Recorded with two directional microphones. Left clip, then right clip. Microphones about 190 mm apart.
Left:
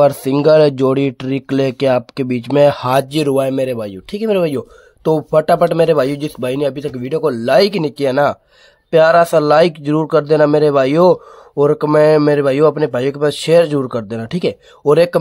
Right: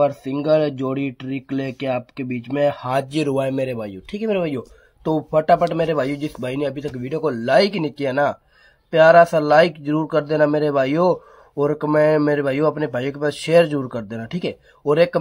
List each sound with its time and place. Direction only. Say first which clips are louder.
0.0 s speech: left 8 dB; 65° left (ahead or behind); by 15.1 s 40° left (ahead or behind)